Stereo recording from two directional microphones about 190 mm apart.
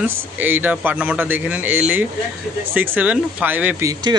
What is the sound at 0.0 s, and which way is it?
A man's voice, 10° right (ahead or behind).